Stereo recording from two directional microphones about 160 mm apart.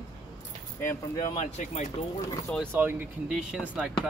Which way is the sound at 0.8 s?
20° left (ahead or behind).